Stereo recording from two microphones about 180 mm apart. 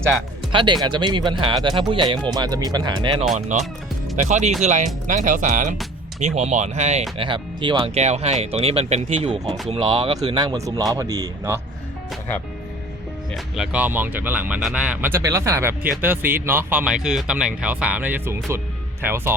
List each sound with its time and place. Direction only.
0.5 s speech: 25° right (ahead or behind)
3.5 s speech: 40° right (ahead or behind)
7.2 s speech: 25° right (ahead or behind)
8.0 s speech: 35° right (ahead or behind); by 11.6 s 15° right (ahead or behind)
13.3 s speech: 5° right (ahead or behind)